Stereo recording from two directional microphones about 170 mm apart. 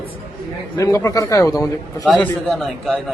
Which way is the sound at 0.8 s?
20° left (ahead or behind).